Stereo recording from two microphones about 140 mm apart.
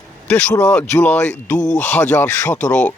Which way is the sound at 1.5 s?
65° left (ahead or behind).